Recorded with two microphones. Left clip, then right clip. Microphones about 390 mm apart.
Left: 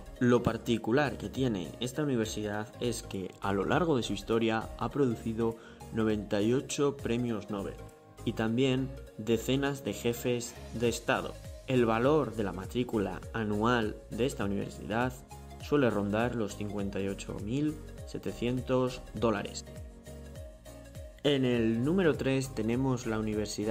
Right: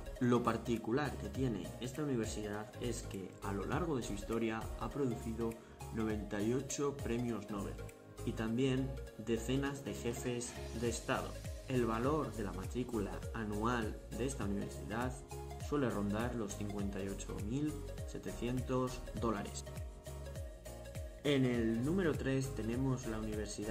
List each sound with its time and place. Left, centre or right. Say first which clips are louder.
0.2 s speech: left 6 dB; centre
21.2 s speech: left 6 dB; centre